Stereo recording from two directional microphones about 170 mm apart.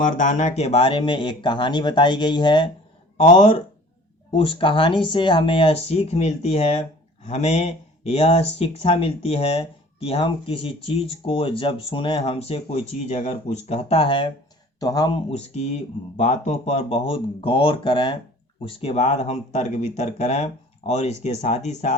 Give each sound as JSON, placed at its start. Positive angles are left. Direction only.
{"t": 0.0, "sound": "speech", "side_deg": 45}
{"t": 3.2, "sound": "speech", "side_deg": 40}
{"t": 4.3, "sound": "speech", "side_deg": 30}
{"t": 15.3, "sound": "speech", "side_deg": 40}